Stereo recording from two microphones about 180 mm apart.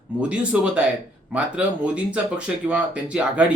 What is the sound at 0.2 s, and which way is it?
Speech, 5° right (ahead or behind).